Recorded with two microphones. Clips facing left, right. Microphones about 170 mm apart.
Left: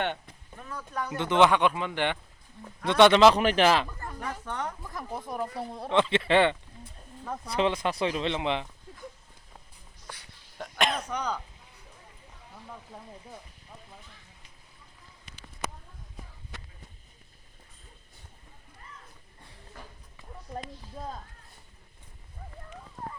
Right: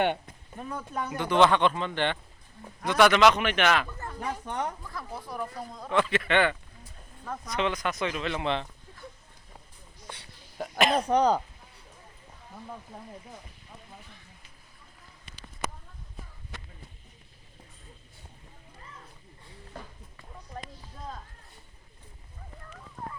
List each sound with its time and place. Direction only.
0.5 s speech: 20° right (ahead or behind)
1.1 s speech: 20° left (ahead or behind)
2.8 s speech: 30° left (ahead or behind)
4.2 s speech: 15° right (ahead or behind)
4.8 s speech: 20° left (ahead or behind)
10.6 s throat clearing: 5° right (ahead or behind)
11.1 s speech: 35° right (ahead or behind)